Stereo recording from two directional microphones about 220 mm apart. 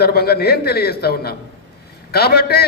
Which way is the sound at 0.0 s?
45° left (ahead or behind).